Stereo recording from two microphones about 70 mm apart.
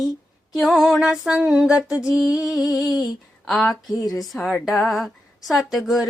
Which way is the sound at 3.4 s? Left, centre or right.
Centre.